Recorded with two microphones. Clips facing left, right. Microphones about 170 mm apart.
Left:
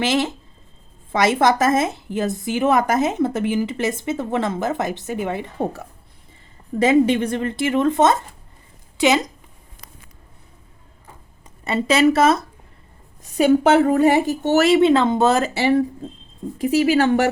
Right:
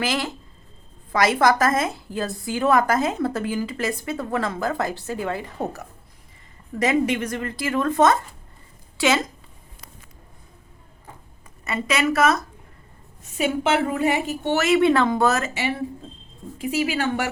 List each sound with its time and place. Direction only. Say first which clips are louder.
0.0 s a woman's voice: left 5 dB; 25° left (ahead or behind)
11.6 s speech: left 7 dB; 30° left (ahead or behind)
13.3 s a woman's voice: left 7 dB; 40° left (ahead or behind)
14.8 s speech: left 3 dB; 20° left (ahead or behind)
16.6 s speech: left 7 dB; 40° left (ahead or behind)